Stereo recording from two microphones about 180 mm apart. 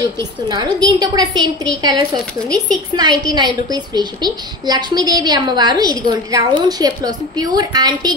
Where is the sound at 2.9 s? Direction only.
25° right (ahead or behind).